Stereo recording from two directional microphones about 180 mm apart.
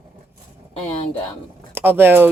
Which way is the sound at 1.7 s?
10° right (ahead or behind).